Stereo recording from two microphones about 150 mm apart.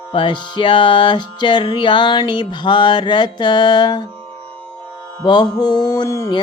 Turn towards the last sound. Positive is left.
turn(degrees=25)  # may be behind; listen again after turning